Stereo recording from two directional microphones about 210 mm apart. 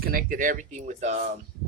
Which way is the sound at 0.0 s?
40° right (ahead or behind).